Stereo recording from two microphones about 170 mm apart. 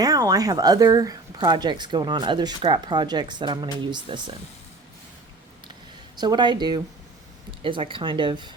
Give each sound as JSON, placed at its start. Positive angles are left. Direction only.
{"t": 0.0, "sound": "a woman's voice", "side_deg": -20}
{"t": 6.1, "sound": "a woman's voice", "side_deg": -25}